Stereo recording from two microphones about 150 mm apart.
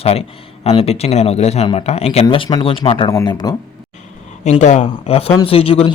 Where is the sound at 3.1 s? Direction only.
25° left (ahead or behind).